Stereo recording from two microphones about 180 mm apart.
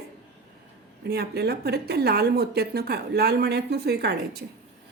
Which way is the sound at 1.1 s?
65° right (ahead or behind).